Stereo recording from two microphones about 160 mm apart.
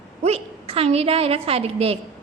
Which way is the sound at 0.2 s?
40° right (ahead or behind).